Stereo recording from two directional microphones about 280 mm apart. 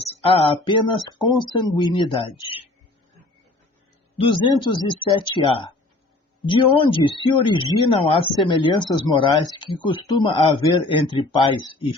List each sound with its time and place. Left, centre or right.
0.0 s speech: left
4.3 s speech: centre